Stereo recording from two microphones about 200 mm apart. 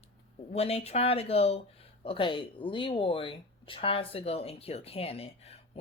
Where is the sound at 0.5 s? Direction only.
30° left (ahead or behind).